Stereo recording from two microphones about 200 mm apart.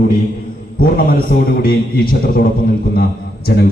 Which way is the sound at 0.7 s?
45° left (ahead or behind).